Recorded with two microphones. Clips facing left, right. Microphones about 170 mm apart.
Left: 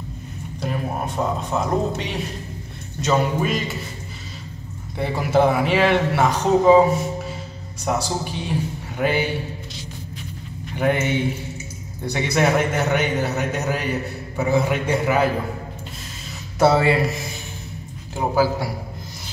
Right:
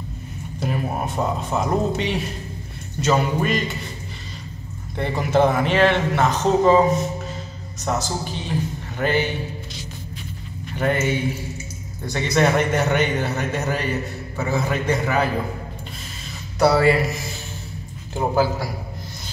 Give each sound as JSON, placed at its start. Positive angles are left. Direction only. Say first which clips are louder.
{"t": 0.6, "sound": "a man's voice", "louder": "right 1 dB", "side_deg": -5}
{"t": 4.9, "sound": "a man's voice", "louder": "even", "side_deg": 5}
{"t": 10.8, "sound": "a man's voice", "louder": "left 1 dB", "side_deg": 15}
{"t": 16.5, "sound": "speech", "louder": "even", "side_deg": 25}
{"t": 18.1, "sound": "a man's voice", "louder": "even", "side_deg": 5}